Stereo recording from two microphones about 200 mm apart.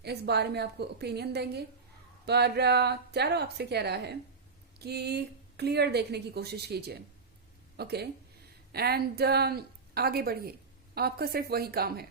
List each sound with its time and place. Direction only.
0.0 s a woman's voice: 55° right (ahead or behind)